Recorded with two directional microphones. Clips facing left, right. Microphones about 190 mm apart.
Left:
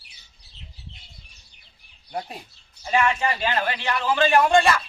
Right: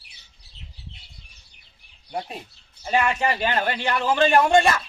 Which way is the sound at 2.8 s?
35° right (ahead or behind).